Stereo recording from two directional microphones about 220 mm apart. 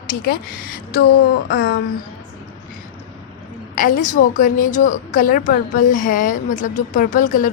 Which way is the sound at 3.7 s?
40° left (ahead or behind).